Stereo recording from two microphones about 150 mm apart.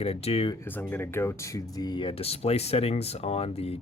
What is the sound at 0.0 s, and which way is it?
Speech, 40° left (ahead or behind).